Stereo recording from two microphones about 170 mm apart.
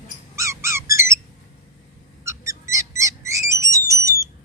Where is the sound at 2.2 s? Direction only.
15° right (ahead or behind).